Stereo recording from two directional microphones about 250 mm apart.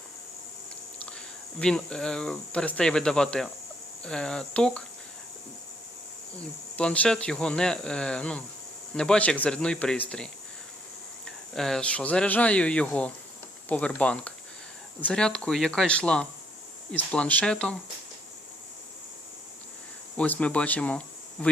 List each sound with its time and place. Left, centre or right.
1.5 s speech: centre
6.7 s speech: centre
11.3 s speech: centre
20.1 s speech: centre